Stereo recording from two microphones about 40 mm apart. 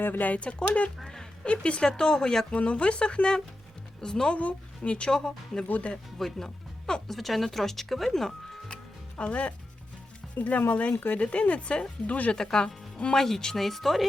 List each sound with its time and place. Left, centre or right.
0.0 s speech: left
0.3 s speech: left
1.0 s a sound: centre
1.5 s speech: left
2.5 s speech: left
4.4 s speech: left
5.1 s speech: centre
5.6 s speech: left
6.1 s speech: centre
7.1 s speech: centre
9.1 s speech: left
12.3 s speech: centre
13.1 s speech: centre